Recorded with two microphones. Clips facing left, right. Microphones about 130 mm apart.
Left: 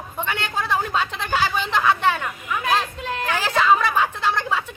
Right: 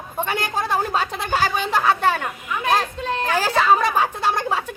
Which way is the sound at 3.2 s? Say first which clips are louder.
Right 1 dB; 40° right (ahead or behind).